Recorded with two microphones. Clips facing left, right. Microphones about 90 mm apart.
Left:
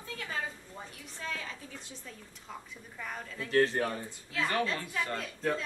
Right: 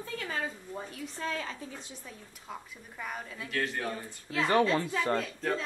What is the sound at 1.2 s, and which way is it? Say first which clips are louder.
Speech: right 4 dB; 50° right (ahead or behind).